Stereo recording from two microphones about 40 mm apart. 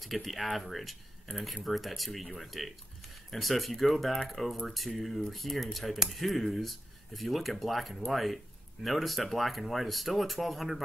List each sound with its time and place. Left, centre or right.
0.0 s speech: centre